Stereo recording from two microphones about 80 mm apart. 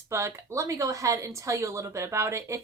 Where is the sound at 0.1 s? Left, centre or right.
Right.